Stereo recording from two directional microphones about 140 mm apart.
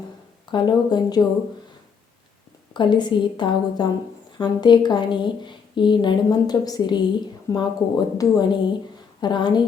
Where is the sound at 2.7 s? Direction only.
35° left (ahead or behind).